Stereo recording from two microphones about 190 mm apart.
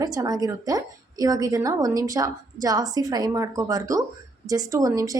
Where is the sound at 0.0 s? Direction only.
20° right (ahead or behind).